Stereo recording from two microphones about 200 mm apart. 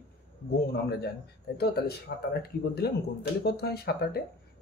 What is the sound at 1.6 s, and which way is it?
Speech, 50° left (ahead or behind).